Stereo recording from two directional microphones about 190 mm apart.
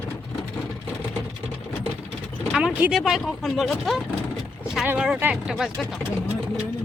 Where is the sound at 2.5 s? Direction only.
5° right (ahead or behind).